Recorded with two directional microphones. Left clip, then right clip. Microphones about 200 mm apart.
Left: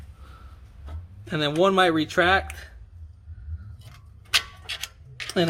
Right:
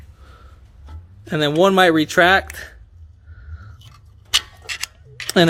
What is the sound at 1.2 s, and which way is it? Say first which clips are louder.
Speech: right 6 dB; 40° right (ahead or behind).